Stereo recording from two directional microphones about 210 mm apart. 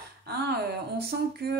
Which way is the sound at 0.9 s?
50° right (ahead or behind).